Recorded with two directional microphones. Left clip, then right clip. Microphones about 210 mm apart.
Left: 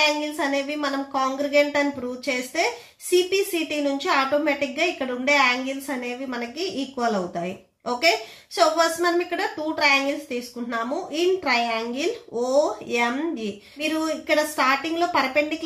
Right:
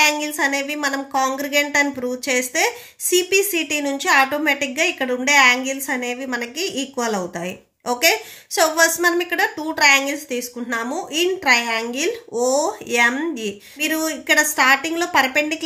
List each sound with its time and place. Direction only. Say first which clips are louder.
0.0 s a woman's voice: right 4 dB; 30° right (ahead or behind)